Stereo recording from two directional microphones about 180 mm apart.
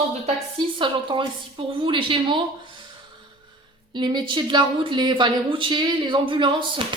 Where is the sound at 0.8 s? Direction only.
25° right (ahead or behind).